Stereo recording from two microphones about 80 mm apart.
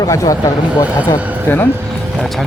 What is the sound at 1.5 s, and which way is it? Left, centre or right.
Speech, left.